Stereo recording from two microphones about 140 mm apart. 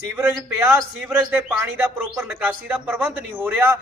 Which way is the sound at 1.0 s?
15° right (ahead or behind).